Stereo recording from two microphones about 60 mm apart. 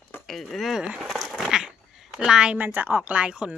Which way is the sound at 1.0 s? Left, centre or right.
Centre.